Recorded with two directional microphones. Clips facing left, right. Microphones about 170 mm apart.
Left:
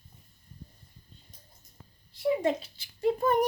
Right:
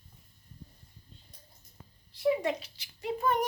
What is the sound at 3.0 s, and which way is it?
Speech, 40° left (ahead or behind).